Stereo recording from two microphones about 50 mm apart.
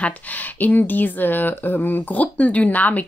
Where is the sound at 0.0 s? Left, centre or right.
Left.